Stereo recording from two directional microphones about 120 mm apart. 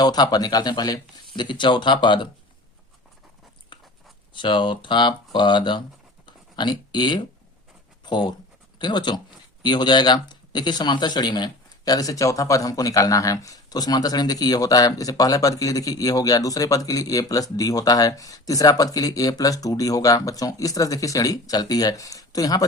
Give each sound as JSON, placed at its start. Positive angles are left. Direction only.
{"t": 0.0, "sound": "speech", "side_deg": 35}
{"t": 4.4, "sound": "speech", "side_deg": 40}
{"t": 6.2, "sound": "a sound", "side_deg": 40}
{"t": 8.0, "sound": "speech", "side_deg": 40}